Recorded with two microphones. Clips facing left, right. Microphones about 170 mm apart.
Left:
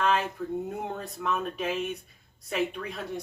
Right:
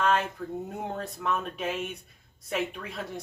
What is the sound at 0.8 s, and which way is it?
Speech, centre (ahead or behind).